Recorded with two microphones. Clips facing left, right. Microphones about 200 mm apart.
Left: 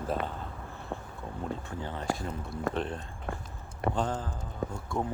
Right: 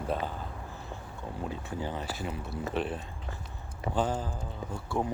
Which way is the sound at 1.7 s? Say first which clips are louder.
Left 1 dB; 10° right (ahead or behind).